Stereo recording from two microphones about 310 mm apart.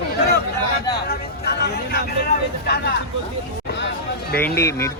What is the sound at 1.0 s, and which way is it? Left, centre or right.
Speech, left.